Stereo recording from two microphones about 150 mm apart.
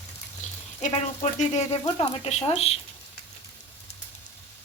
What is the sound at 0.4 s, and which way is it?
Sizzle, 55° left (ahead or behind).